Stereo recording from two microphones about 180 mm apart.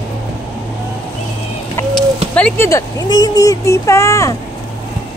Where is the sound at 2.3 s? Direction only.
10° left (ahead or behind).